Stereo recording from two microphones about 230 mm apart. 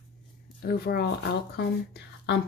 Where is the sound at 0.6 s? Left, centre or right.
Left.